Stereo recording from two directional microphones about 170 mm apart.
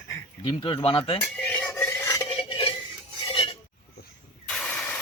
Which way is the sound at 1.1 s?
5° left (ahead or behind).